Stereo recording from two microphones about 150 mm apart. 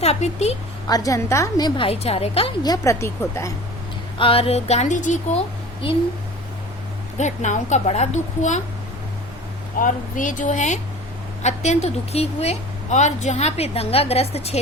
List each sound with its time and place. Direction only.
0.0 s a woman's voice: 45° left (ahead or behind)
0.9 s a woman's voice: 25° left (ahead or behind); by 2.5 s 40° left (ahead or behind)
2.6 s a woman's voice: 20° left (ahead or behind)
4.2 s a woman's voice: 40° left (ahead or behind); by 5.4 s 55° left (ahead or behind)
5.8 s a woman's voice: 35° left (ahead or behind)
7.2 s a woman's voice: 55° left (ahead or behind)
9.7 s a woman's voice: 60° left (ahead or behind); by 14.6 s 45° left (ahead or behind)